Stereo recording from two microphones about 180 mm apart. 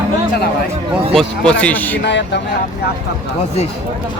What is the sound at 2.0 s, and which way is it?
Speech, 75° left (ahead or behind).